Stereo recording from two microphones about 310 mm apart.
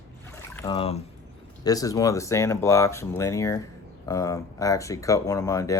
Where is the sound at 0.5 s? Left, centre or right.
Centre.